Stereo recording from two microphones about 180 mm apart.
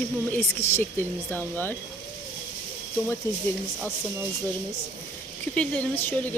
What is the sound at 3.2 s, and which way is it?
Speech, 15° left (ahead or behind).